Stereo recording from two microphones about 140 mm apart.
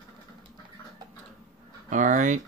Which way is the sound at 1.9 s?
65° right (ahead or behind).